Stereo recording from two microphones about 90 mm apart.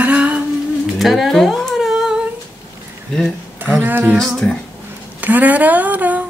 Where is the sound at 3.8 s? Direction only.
20° right (ahead or behind).